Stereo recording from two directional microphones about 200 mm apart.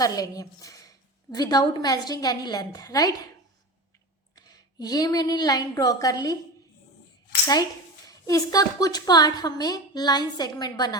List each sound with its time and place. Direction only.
0.0 s a woman's voice: 15° left (ahead or behind)
4.4 s a woman's voice: 20° left (ahead or behind)
8.3 s a woman's voice: 20° left (ahead or behind)